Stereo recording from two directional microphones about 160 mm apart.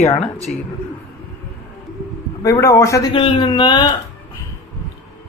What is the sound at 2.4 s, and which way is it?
Speech, 20° left (ahead or behind).